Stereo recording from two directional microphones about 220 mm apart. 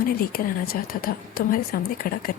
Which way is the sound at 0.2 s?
45° left (ahead or behind).